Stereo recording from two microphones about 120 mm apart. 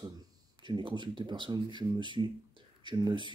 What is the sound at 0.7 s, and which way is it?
Speech, 40° right (ahead or behind).